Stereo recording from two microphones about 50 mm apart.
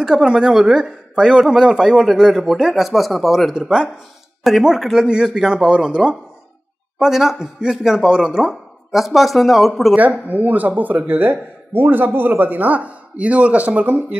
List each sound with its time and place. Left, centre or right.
0.0 s a man's voice: centre
7.0 s a man's voice: centre
8.9 s speech: centre
9.9 s speech: right